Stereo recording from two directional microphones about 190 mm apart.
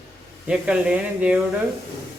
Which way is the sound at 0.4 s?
5° right (ahead or behind).